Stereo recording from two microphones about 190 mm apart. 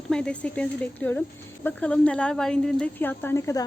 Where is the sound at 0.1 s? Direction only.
5° left (ahead or behind).